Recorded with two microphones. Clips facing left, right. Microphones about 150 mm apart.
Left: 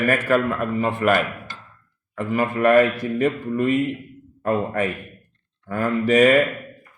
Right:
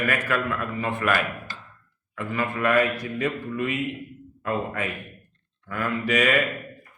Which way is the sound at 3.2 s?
45° left (ahead or behind).